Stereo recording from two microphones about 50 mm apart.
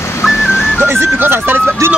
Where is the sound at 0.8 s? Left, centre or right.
Right.